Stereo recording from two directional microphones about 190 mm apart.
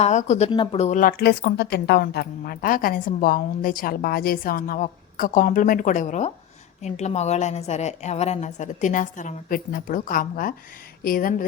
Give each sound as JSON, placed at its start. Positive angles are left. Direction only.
{"t": 0.0, "sound": "a woman's voice", "side_deg": 40}